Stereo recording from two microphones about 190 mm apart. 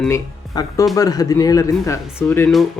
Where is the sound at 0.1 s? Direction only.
15° left (ahead or behind).